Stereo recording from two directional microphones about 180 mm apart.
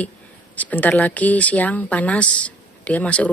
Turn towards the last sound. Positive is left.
turn(degrees=5)  # may be behind; listen again after turning